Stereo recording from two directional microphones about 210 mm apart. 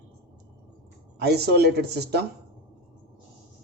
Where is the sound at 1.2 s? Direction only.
50° right (ahead or behind).